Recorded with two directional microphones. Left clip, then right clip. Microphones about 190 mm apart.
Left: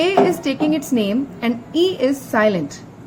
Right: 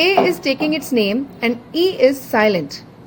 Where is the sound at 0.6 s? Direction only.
25° right (ahead or behind).